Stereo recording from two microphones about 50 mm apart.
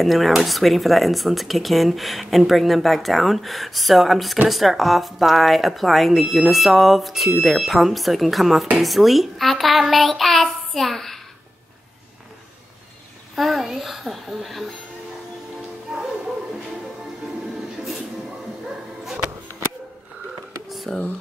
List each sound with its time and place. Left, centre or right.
0.0 s speech: centre
13.4 s speech: centre
15.9 s music: centre
20.6 s a sound: centre